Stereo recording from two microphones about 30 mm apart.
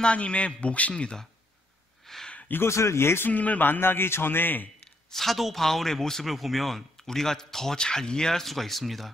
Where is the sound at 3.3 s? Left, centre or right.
Left.